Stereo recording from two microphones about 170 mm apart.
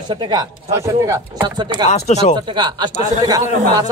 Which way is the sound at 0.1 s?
25° right (ahead or behind).